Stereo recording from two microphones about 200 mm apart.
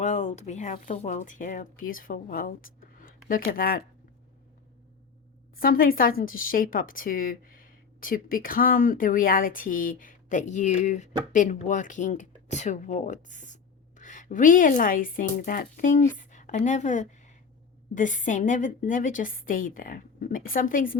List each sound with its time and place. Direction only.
0.0 s speech: 35° left (ahead or behind)
5.5 s a woman's voice: 45° left (ahead or behind)